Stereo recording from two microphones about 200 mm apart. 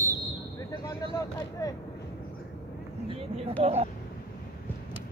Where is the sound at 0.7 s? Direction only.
20° left (ahead or behind).